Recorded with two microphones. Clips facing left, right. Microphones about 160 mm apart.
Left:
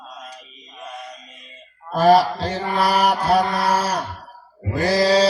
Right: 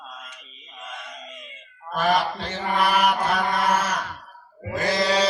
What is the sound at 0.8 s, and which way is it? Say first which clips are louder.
Chant: left 4 dB; 35° left (ahead or behind).